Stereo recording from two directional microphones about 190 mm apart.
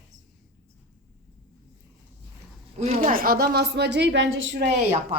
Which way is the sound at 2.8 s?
35° right (ahead or behind).